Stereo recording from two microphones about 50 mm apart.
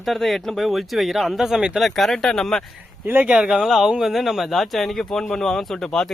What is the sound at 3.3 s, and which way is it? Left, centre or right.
Speech, centre.